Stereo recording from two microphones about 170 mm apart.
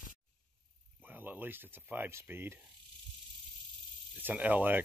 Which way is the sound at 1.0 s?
10° right (ahead or behind).